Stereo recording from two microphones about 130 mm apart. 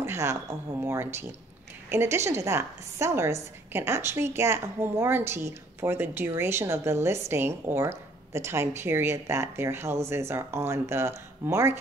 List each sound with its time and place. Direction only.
0.0 s a woman's voice: 20° right (ahead or behind)